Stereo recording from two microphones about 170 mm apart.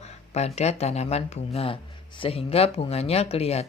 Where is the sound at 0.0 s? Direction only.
40° left (ahead or behind).